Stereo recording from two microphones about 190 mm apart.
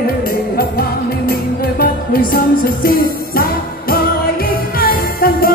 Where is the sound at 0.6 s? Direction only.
55° left (ahead or behind).